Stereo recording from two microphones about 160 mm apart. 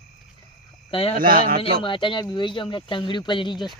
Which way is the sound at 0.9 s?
35° left (ahead or behind).